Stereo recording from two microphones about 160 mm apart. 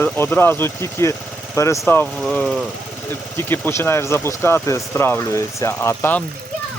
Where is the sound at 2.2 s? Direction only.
5° left (ahead or behind).